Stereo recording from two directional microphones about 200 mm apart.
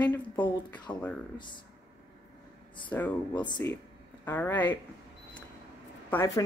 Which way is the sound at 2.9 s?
10° left (ahead or behind).